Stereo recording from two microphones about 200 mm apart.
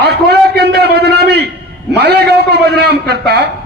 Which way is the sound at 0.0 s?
55° right (ahead or behind).